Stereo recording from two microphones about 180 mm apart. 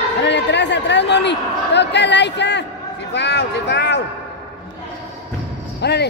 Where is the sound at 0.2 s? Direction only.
75° left (ahead or behind).